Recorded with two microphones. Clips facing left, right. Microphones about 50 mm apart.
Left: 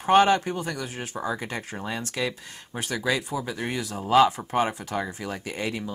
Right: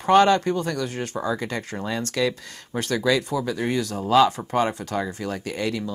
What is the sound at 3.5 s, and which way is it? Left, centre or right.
Speech, left.